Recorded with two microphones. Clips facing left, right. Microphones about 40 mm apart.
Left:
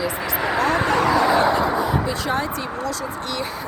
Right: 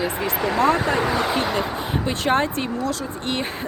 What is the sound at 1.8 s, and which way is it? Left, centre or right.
Speech, right.